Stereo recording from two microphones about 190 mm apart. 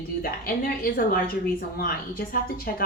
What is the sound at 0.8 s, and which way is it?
A woman's voice, 50° left (ahead or behind).